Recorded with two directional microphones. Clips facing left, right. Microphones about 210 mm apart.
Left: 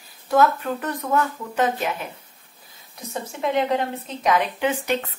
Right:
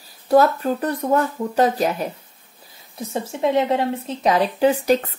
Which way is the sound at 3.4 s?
25° right (ahead or behind).